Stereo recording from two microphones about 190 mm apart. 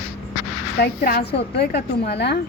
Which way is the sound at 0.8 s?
50° left (ahead or behind).